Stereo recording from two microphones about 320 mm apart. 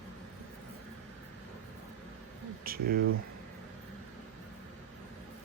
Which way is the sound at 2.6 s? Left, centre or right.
Right.